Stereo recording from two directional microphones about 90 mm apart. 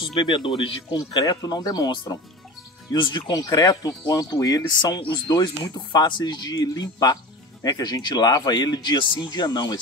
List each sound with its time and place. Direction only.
0.1 s speech: 60° left (ahead or behind)
1.1 s speech: 45° left (ahead or behind)
2.9 s speech: 65° left (ahead or behind)
3.3 s speech: 45° left (ahead or behind)